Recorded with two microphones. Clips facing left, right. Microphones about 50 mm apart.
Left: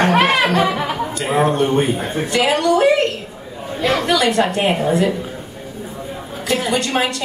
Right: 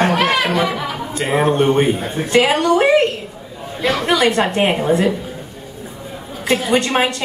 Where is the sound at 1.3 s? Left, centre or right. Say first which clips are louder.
Right 1 dB; right.